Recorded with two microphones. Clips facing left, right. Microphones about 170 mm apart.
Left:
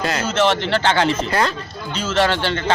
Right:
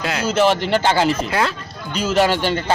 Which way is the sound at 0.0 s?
5° right (ahead or behind).